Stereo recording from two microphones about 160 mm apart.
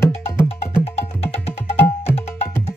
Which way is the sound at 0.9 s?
40° left (ahead or behind).